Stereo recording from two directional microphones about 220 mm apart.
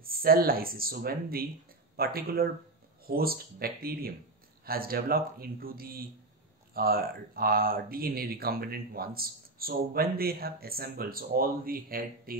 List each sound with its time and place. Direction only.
0.0 s speech: 40° right (ahead or behind)